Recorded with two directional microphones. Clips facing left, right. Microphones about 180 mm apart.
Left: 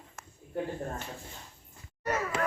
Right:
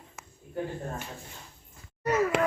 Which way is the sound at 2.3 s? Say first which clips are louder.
Right 3 dB; 75° right (ahead or behind).